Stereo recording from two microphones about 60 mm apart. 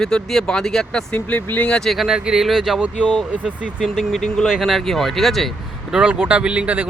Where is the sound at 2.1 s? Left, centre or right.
Centre.